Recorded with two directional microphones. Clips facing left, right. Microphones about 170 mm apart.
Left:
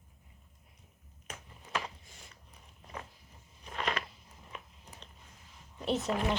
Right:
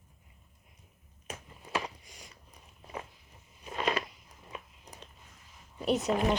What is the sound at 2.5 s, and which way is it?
Biting, 15° right (ahead or behind).